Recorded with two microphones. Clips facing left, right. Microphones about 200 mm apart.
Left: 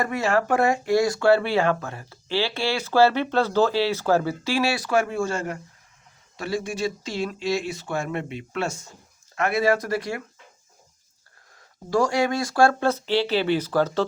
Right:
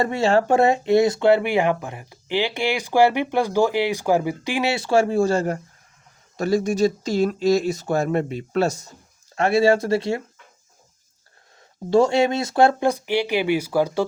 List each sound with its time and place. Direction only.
0.0 s speech: 25° right (ahead or behind)
11.9 s speech: 25° right (ahead or behind)